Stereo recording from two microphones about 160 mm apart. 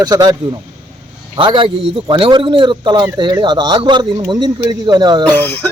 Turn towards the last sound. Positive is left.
turn(degrees=10)  # may be behind; listen again after turning